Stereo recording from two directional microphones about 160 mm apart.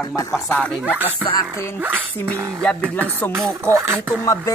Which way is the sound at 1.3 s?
25° left (ahead or behind).